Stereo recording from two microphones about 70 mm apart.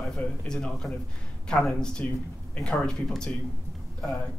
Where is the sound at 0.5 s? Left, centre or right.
Centre.